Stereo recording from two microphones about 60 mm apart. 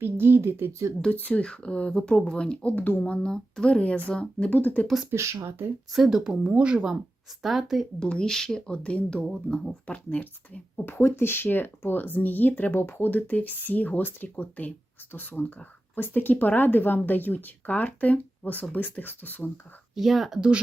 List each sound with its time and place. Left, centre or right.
0.0 s speech: right
0.7 s speech: right
1.1 s speech: left
2.7 s speech: left
3.0 s speech: centre
4.5 s speech: left
5.1 s speech: right
5.9 s speech: centre
7.4 s speech: centre
7.9 s speech: centre
9.2 s speech: centre
9.8 s speech: left
10.8 s speech: left
20.0 s speech: centre